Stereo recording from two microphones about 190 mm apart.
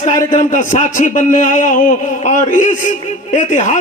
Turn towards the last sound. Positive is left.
turn(degrees=40)  # may be behind; listen again after turning